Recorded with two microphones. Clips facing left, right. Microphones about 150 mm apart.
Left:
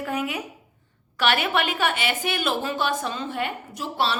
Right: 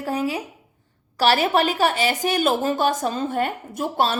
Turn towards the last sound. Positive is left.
turn(degrees=-45)  # may be behind; listen again after turning